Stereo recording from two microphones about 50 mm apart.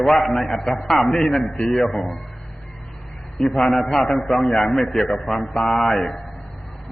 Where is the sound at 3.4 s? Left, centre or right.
Centre.